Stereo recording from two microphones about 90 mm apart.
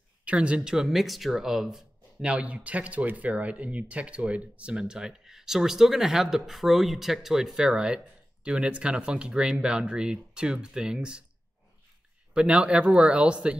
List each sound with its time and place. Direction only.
0.2 s speech: 15° right (ahead or behind)
12.4 s speech: 10° right (ahead or behind)